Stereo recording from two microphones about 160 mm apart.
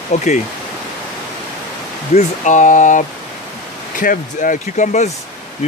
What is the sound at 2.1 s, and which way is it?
Speech, 50° left (ahead or behind).